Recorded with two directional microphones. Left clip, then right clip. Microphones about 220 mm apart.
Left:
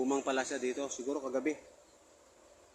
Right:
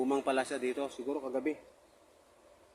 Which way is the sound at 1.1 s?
Centre (ahead or behind).